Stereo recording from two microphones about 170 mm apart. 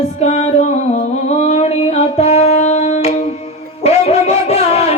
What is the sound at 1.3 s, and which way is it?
Music, 40° left (ahead or behind).